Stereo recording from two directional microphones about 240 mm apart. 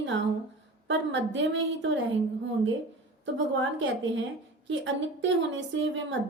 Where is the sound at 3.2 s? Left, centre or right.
Right.